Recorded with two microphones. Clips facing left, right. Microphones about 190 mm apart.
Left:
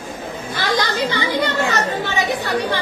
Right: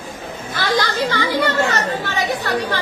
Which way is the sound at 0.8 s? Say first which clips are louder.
Even; 20° left (ahead or behind).